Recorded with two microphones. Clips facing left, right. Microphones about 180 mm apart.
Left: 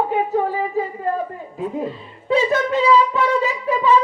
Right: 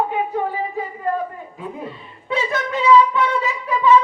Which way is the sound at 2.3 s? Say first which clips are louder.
Left 5 dB; 35° left (ahead or behind).